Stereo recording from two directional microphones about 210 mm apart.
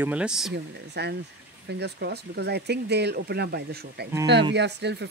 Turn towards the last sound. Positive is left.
turn(degrees=-55)  # may be behind; listen again after turning